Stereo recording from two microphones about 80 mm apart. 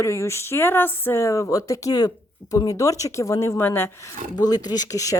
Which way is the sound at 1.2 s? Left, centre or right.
Left.